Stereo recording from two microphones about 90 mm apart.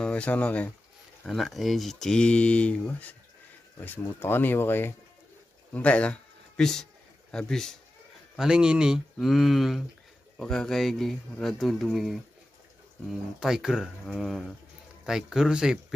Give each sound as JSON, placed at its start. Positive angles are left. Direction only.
{"t": 0.0, "sound": "speech", "side_deg": 15}
{"t": 1.2, "sound": "speech", "side_deg": 0}
{"t": 5.7, "sound": "a sound", "side_deg": 15}
{"t": 8.4, "sound": "speech", "side_deg": -10}